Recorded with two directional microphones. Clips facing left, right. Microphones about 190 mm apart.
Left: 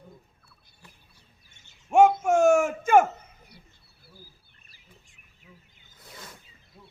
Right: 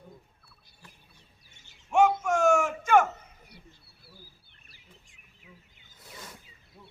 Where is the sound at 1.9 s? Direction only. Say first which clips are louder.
Left 4 dB; 45° left (ahead or behind).